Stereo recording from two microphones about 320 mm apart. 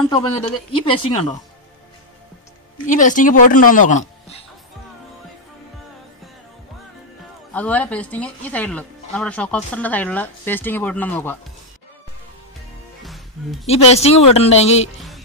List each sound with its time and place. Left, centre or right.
0.1 s speech: centre
2.9 s a woman's voice: left
7.5 s speech: centre
13.0 s music: centre
13.7 s a woman's voice: centre
15.0 s music: centre